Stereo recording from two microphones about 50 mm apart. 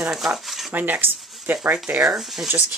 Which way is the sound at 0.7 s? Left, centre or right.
Right.